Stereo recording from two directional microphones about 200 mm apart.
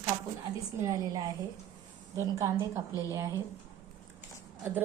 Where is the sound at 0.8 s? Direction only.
20° right (ahead or behind).